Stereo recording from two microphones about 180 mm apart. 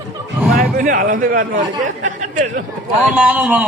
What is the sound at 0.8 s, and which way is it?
Speech, 50° right (ahead or behind).